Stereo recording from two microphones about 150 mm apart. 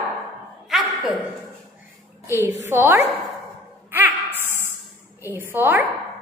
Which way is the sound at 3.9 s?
15° right (ahead or behind).